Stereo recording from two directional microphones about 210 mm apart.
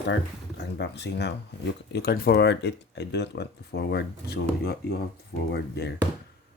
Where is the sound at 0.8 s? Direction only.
50° left (ahead or behind).